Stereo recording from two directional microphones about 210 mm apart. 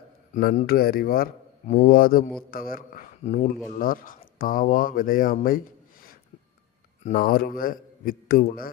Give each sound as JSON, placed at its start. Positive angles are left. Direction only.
{"t": 0.3, "sound": "a man's voice", "side_deg": 40}